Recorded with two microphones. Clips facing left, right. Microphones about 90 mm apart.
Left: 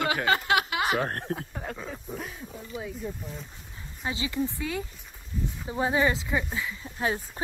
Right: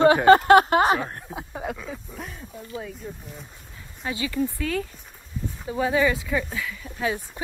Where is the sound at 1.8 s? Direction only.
Centre (ahead or behind).